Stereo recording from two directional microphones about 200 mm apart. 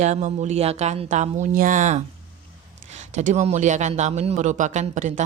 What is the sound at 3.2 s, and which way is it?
A woman's voice, 35° right (ahead or behind).